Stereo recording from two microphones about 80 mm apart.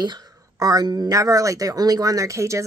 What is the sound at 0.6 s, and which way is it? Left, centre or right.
Speech, right.